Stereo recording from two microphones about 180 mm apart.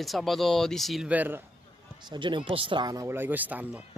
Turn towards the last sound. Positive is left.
turn(degrees=-10)  # may be behind; listen again after turning